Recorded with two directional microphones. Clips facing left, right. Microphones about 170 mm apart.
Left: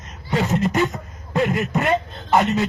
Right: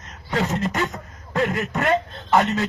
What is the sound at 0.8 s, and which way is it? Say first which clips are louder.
A man's voice: left 4 dB; 10° left (ahead or behind).